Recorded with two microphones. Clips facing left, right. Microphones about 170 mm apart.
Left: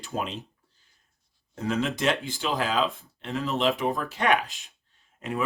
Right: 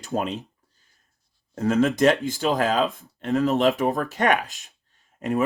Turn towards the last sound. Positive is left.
turn(degrees=-45)  # may be behind; listen again after turning